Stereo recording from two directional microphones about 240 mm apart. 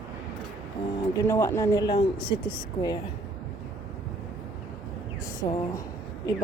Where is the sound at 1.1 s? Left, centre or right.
Centre.